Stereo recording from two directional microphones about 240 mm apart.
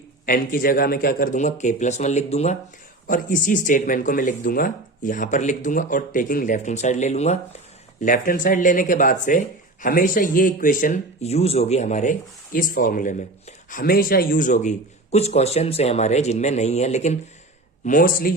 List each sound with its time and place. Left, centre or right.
0.3 s a man's voice: left